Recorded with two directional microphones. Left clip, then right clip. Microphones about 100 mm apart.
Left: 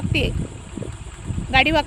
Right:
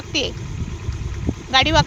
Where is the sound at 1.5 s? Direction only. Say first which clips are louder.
Right 1 dB; 30° left (ahead or behind).